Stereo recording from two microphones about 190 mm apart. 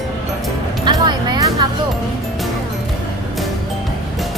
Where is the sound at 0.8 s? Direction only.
25° right (ahead or behind).